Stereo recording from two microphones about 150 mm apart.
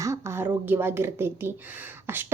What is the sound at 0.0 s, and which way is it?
A woman's voice, 20° right (ahead or behind).